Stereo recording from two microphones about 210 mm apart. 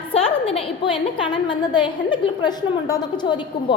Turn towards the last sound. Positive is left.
turn(degrees=20)  # may be behind; listen again after turning